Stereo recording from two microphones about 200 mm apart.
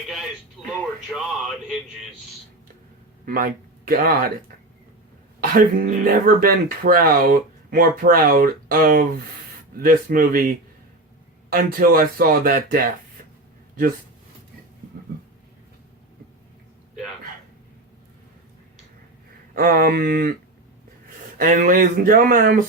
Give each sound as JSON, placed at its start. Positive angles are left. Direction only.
{"t": 1.1, "sound": "a sound", "side_deg": 0}
{"t": 3.2, "sound": "speech", "side_deg": -45}
{"t": 5.4, "sound": "speech", "side_deg": -45}
{"t": 11.5, "sound": "speech", "side_deg": -45}
{"t": 19.5, "sound": "speech", "side_deg": -45}
{"t": 21.3, "sound": "speech", "side_deg": -40}